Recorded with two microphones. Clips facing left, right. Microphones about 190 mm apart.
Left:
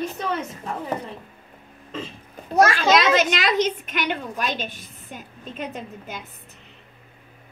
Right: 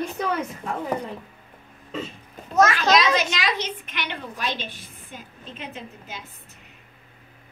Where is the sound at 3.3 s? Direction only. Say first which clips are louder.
Left 6 dB; 50° left (ahead or behind).